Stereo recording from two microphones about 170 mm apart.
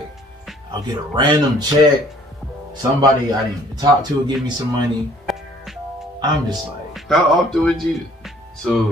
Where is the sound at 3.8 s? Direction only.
25° right (ahead or behind).